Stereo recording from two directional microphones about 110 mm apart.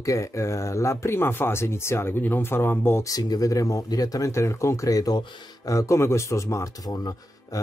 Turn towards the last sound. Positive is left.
turn(degrees=35)  # may be behind; listen again after turning